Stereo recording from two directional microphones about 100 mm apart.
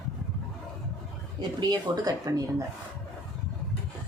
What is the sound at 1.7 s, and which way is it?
Speech, 35° right (ahead or behind).